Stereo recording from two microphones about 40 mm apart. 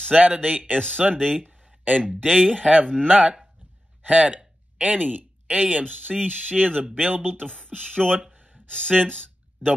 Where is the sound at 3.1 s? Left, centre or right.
Right.